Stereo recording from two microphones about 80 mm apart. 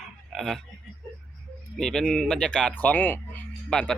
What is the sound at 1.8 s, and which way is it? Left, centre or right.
Speech, centre.